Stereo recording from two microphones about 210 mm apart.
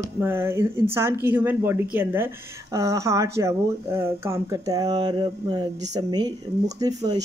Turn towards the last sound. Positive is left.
turn(degrees=-15)  # may be behind; listen again after turning